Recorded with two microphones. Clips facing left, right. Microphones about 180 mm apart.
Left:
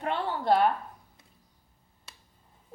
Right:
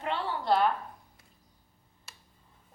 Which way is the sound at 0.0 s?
50° left (ahead or behind).